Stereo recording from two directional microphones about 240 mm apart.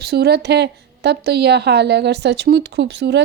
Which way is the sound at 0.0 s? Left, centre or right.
Right.